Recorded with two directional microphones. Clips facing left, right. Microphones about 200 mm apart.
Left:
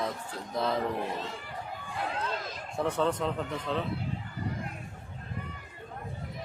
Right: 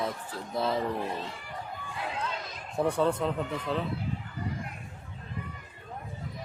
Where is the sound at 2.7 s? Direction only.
15° right (ahead or behind).